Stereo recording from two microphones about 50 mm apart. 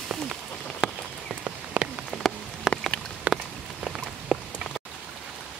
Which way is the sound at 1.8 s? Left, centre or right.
Right.